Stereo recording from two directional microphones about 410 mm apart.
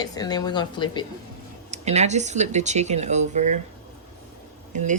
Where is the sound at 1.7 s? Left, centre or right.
Centre.